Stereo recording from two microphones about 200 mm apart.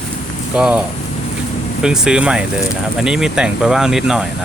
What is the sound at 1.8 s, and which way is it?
Speech, 5° right (ahead or behind).